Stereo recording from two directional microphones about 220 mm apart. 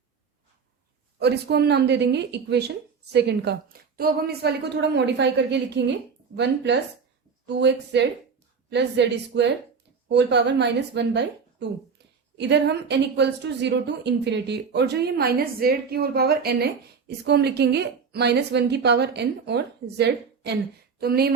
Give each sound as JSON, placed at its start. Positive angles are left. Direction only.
{"t": 1.2, "sound": "speech", "side_deg": -50}